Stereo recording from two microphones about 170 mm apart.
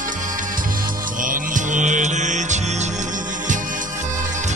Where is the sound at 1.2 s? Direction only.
50° right (ahead or behind).